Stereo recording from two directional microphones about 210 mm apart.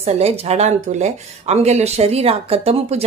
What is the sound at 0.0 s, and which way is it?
Speech, 30° right (ahead or behind).